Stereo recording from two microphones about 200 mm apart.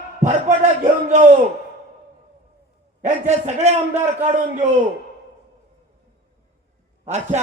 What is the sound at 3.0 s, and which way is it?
Speech, 35° right (ahead or behind).